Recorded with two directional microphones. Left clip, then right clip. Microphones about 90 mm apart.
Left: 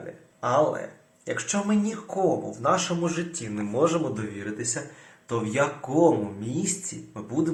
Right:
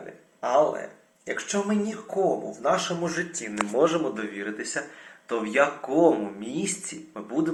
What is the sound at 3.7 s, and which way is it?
A man's voice, 25° left (ahead or behind).